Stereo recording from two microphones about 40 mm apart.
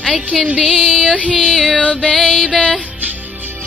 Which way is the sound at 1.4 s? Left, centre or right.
Centre.